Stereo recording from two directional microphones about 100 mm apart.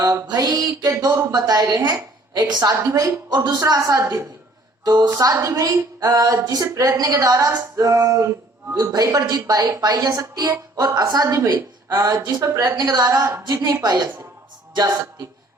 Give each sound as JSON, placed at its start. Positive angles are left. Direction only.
{"t": 0.0, "sound": "a woman's voice", "side_deg": -40}
{"t": 4.9, "sound": "speech", "side_deg": -45}
{"t": 5.1, "sound": "a woman's voice", "side_deg": -30}